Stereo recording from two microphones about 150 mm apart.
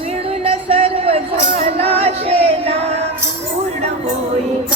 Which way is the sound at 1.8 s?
40° right (ahead or behind).